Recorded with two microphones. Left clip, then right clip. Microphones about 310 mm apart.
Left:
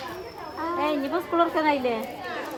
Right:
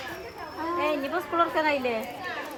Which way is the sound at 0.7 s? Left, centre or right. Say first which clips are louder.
Left 1 dB; left.